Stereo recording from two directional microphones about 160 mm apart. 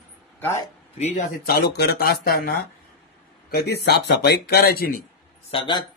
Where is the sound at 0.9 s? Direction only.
45° left (ahead or behind).